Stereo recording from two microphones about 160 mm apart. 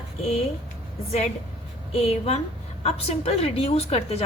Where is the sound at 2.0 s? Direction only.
40° left (ahead or behind).